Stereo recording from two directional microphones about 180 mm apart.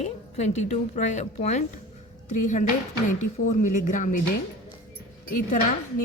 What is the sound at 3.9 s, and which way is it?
Speech, 45° left (ahead or behind).